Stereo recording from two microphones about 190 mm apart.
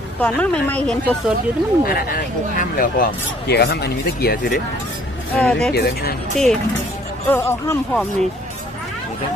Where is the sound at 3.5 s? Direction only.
60° left (ahead or behind).